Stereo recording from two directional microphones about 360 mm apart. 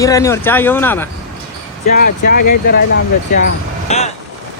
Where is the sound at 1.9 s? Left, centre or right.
Left.